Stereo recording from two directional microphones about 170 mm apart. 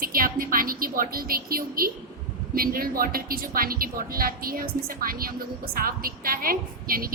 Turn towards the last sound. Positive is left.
turn(degrees=-60)  # may be behind; listen again after turning